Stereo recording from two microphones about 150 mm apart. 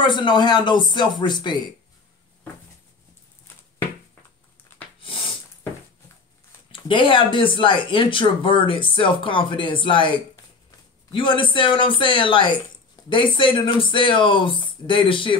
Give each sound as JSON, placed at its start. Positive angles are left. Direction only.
{"t": 0.0, "sound": "speech", "side_deg": 30}
{"t": 6.7, "sound": "speech", "side_deg": 35}